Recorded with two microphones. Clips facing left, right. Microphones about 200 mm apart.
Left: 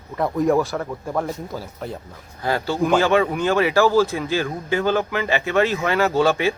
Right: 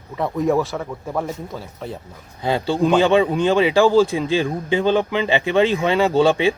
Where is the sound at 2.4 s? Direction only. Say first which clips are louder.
Right 3 dB; 20° right (ahead or behind).